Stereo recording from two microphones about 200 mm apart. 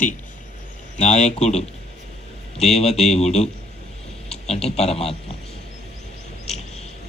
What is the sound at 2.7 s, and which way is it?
Speech, 30° left (ahead or behind).